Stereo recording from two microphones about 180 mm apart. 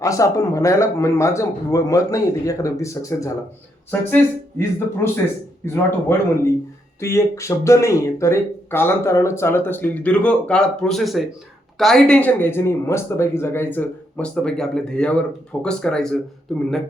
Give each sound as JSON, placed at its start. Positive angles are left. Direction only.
{"t": 0.0, "sound": "speech", "side_deg": 20}